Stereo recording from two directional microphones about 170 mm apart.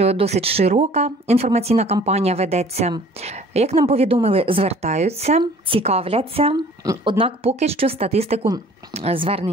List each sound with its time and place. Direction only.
0.0 s a woman's voice: 35° right (ahead or behind)